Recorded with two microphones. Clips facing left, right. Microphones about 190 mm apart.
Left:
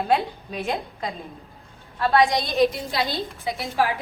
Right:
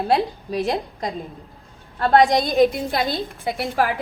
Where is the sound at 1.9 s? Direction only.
50° right (ahead or behind).